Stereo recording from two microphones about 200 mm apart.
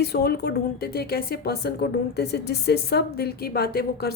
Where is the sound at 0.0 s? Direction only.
55° left (ahead or behind).